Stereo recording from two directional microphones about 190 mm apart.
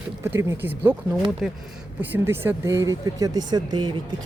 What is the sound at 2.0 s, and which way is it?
Speech, 10° right (ahead or behind).